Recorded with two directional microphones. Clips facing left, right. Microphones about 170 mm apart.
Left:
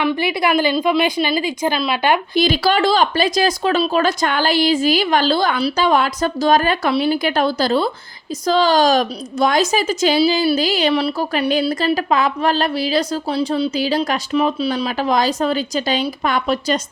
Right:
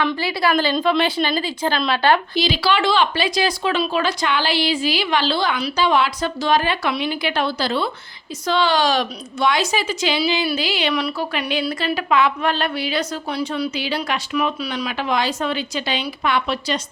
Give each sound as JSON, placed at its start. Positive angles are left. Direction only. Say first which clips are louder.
{"t": 0.0, "sound": "a woman's voice", "louder": "left 2 dB", "side_deg": 20}
{"t": 2.3, "sound": "speech", "louder": "left 4 dB", "side_deg": 50}